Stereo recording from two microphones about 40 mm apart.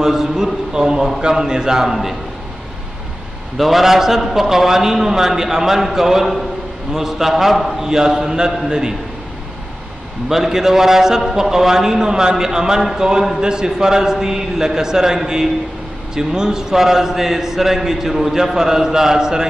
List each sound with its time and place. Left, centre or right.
0.0 s a man's voice: centre
3.5 s a man's voice: centre
10.3 s a man's voice: centre